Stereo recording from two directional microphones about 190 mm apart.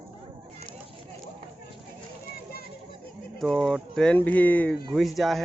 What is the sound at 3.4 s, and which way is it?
Speech, centre (ahead or behind).